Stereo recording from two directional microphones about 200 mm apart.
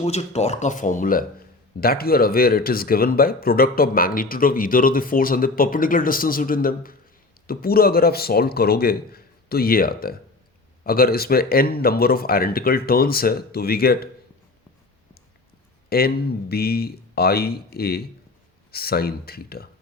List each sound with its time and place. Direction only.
0.0 s speech: 35° left (ahead or behind); by 14.1 s 50° left (ahead or behind)
15.9 s speech: 50° left (ahead or behind)